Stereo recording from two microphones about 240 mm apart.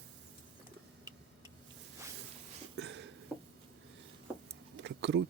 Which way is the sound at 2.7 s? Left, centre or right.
Right.